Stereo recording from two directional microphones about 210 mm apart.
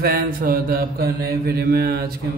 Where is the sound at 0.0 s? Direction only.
45° right (ahead or behind).